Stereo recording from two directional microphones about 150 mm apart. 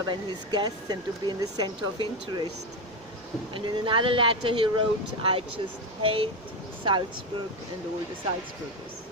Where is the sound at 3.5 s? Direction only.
35° right (ahead or behind).